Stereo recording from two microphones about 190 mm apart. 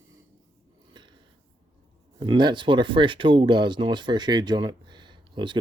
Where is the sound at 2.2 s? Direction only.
25° right (ahead or behind).